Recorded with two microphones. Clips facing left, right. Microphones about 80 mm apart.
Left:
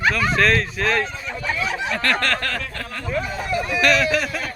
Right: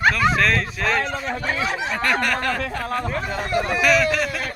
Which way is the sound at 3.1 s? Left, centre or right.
Right.